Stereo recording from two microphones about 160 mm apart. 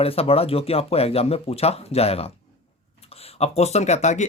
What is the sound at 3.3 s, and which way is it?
Speech, 40° left (ahead or behind).